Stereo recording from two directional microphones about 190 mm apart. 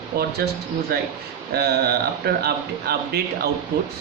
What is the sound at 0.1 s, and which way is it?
A man's voice, 50° right (ahead or behind).